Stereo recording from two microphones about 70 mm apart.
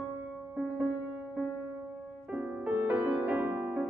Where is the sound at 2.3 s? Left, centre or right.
Right.